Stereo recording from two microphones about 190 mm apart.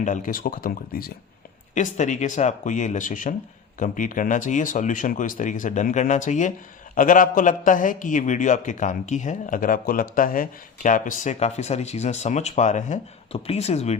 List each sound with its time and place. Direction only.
0.0 s speech: 45° left (ahead or behind)
1.7 s a man's voice: 40° left (ahead or behind)